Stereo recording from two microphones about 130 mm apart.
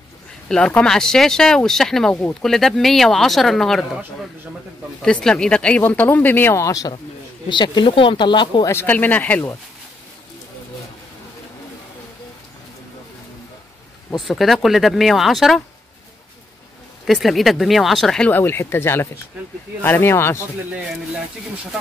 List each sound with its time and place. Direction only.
0.5 s speech: 5° left (ahead or behind)
5.0 s speech: 5° left (ahead or behind); by 6.9 s 25° left (ahead or behind)
7.4 s speech: 35° left (ahead or behind)
8.6 s speech: 15° left (ahead or behind)
14.1 s speech: centre (ahead or behind)
17.0 s speech: centre (ahead or behind); by 20.4 s 20° left (ahead or behind)